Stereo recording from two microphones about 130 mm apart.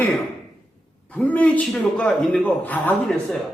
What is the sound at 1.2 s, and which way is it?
A man's voice, 10° left (ahead or behind).